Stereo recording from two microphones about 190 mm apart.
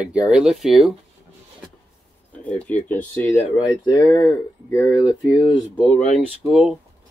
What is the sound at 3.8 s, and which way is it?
Speech, 20° left (ahead or behind).